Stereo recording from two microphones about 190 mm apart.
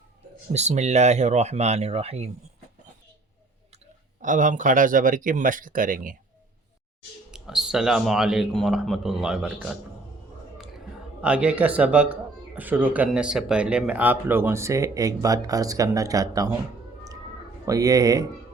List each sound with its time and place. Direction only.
0.5 s speech: 35° right (ahead or behind)
4.2 s speech: 40° right (ahead or behind)
7.3 s speech: 5° right (ahead or behind)
11.2 s speech: 5° right (ahead or behind)
17.7 s speech: 20° right (ahead or behind)